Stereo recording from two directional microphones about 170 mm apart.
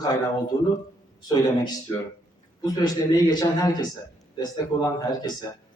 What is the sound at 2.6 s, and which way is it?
A man's voice, 20° left (ahead or behind).